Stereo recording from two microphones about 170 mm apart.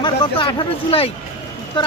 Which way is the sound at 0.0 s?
30° left (ahead or behind).